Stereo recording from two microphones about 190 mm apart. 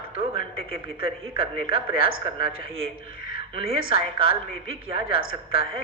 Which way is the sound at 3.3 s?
30° right (ahead or behind).